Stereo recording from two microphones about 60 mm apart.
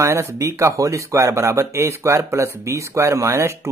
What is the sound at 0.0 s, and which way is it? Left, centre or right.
Speech, right.